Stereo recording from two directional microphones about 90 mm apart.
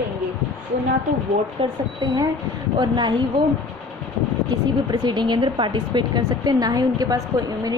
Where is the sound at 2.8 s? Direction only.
60° right (ahead or behind).